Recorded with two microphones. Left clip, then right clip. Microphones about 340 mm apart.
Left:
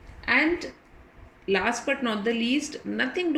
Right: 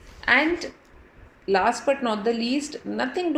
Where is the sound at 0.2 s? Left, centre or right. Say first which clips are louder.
Right 3 dB; right.